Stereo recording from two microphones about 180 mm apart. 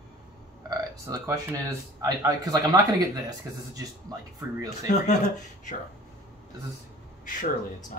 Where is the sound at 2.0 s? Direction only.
20° right (ahead or behind).